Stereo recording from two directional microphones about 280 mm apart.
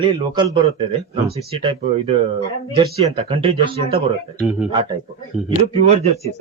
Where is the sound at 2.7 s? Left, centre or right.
Centre.